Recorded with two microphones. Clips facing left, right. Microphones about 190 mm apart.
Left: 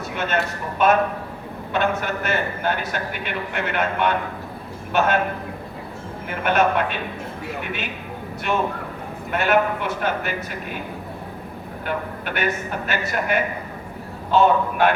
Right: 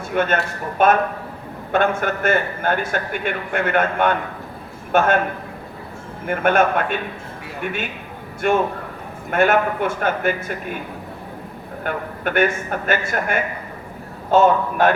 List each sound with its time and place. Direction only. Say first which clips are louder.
0.1 s a man's voice: right 5 dB; 50° right (ahead or behind)
6.2 s a man's voice: right 3 dB; 50° right (ahead or behind)
11.9 s a man's voice: right 3 dB; 50° right (ahead or behind)